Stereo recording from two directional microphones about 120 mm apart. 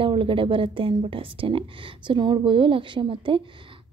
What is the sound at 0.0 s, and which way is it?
A woman's voice, 45° right (ahead or behind).